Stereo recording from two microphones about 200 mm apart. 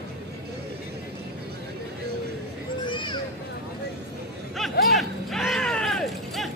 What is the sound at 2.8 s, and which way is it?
Children playing, 25° left (ahead or behind).